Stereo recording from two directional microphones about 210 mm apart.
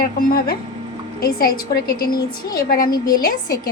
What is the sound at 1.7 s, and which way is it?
A woman's voice, 45° left (ahead or behind).